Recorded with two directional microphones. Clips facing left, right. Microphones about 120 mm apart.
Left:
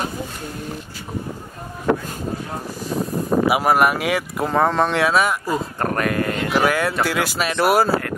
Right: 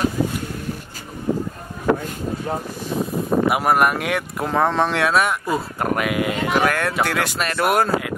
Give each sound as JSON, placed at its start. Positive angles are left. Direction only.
{"t": 3.0, "sound": "speech", "side_deg": 0}
{"t": 6.5, "sound": "speech", "side_deg": 5}